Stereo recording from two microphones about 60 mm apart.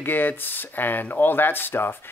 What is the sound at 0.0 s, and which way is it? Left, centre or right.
Speech, left.